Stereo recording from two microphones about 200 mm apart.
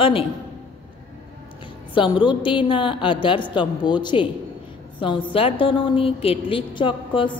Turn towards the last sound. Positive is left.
turn(degrees=25)  # may be behind; listen again after turning